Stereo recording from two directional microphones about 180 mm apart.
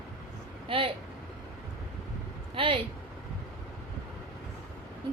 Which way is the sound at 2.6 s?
30° right (ahead or behind).